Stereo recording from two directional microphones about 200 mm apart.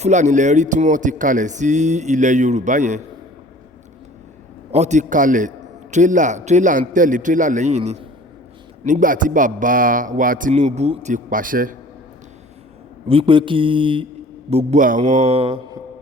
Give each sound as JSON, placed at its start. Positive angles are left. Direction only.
{"t": 0.0, "sound": "a man's voice", "side_deg": -35}
{"t": 4.7, "sound": "a man's voice", "side_deg": -35}
{"t": 13.1, "sound": "speech", "side_deg": -25}
{"t": 14.5, "sound": "a man's voice", "side_deg": -40}